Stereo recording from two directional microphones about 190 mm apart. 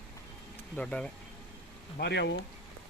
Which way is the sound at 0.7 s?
5° left (ahead or behind).